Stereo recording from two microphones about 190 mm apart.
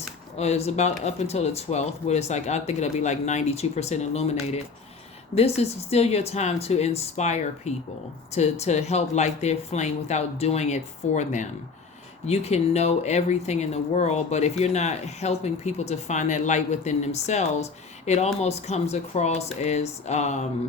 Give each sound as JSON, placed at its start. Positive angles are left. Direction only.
{"t": 0.3, "sound": "speech", "side_deg": 35}